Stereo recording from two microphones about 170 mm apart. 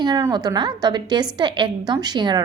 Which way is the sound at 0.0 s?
20° right (ahead or behind).